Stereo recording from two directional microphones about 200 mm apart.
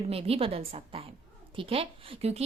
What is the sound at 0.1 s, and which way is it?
A woman's voice, 30° right (ahead or behind).